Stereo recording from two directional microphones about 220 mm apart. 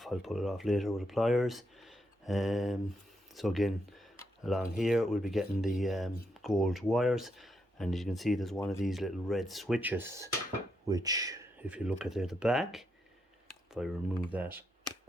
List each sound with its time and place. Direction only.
0.0 s speech: centre (ahead or behind); by 11.3 s 15° right (ahead or behind)
11.6 s speech: 5° right (ahead or behind)